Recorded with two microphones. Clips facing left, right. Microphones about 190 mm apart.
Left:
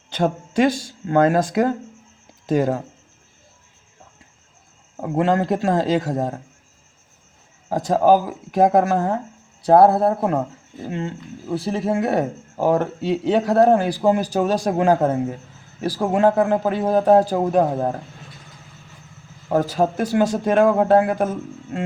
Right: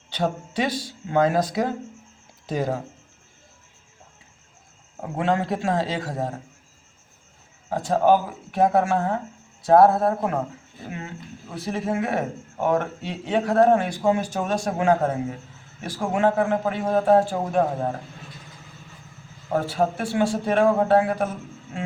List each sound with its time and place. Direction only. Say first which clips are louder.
0.1 s speech: left 4 dB; 45° left (ahead or behind)
5.0 s speech: left 5 dB; 45° left (ahead or behind)
7.7 s speech: left 3 dB; 40° left (ahead or behind)
19.5 s speech: left 4 dB; 40° left (ahead or behind)